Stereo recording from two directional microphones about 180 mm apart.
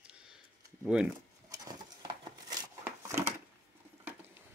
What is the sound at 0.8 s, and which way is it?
Speech, 5° right (ahead or behind).